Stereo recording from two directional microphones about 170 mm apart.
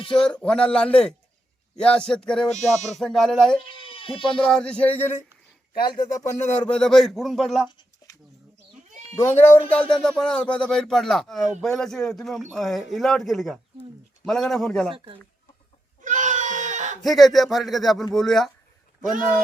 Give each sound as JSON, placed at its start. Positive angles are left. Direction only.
{"t": 0.2, "sound": "speech", "side_deg": 5}
{"t": 3.6, "sound": "speech", "side_deg": 30}
{"t": 4.4, "sound": "speech", "side_deg": 5}
{"t": 6.5, "sound": "speech", "side_deg": 5}
{"t": 9.1, "sound": "speech", "side_deg": 15}
{"t": 14.9, "sound": "speech", "side_deg": -30}
{"t": 16.0, "sound": "screaming", "side_deg": -50}
{"t": 17.0, "sound": "speech", "side_deg": 0}